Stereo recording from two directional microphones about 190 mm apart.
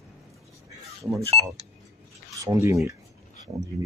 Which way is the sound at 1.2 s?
30° right (ahead or behind).